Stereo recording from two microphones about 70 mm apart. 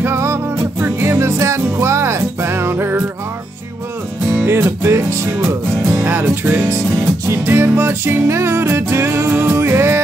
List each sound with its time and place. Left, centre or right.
0.0 s music: right
4.5 s music: right
5.9 s music: right